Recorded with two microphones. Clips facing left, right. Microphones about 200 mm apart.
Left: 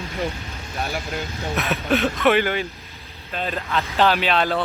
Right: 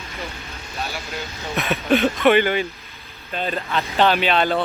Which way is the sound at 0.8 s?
50° left (ahead or behind).